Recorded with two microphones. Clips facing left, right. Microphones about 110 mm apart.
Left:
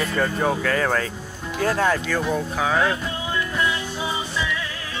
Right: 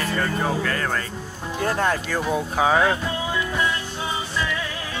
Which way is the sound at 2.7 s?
45° right (ahead or behind).